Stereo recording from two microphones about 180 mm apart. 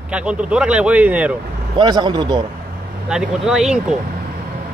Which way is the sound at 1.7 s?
25° right (ahead or behind).